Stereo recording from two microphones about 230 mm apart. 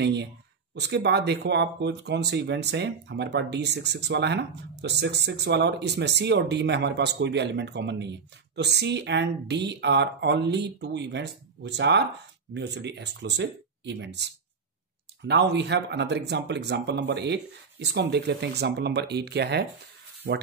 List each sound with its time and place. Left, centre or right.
0.0 s speech: right